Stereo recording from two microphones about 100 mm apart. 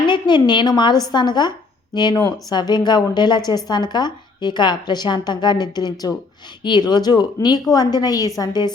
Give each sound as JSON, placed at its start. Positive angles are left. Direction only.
{"t": 0.1, "sound": "a woman's voice", "side_deg": 50}